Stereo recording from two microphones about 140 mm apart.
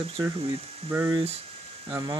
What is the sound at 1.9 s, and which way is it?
Speech, 30° right (ahead or behind).